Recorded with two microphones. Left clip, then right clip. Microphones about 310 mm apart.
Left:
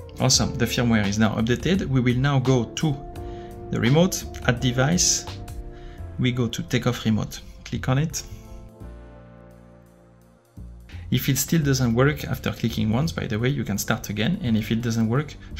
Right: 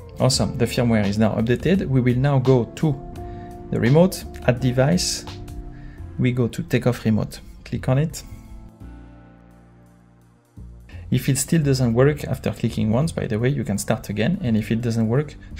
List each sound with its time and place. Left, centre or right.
0.2 s speech: centre
4.0 s speech: centre
5.2 s music: centre
6.2 s speech: centre
11.1 s speech: centre